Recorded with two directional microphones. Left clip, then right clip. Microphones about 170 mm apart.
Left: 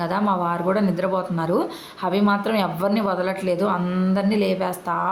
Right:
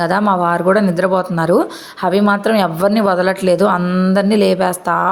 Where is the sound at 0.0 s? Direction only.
40° right (ahead or behind).